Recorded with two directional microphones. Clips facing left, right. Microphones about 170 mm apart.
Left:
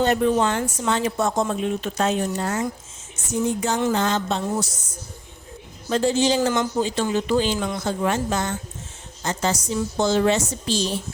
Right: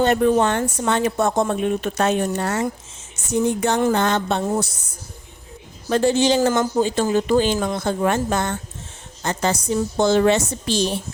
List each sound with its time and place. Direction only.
0.0 s speech: 55° right (ahead or behind)
5.9 s speech: 60° right (ahead or behind)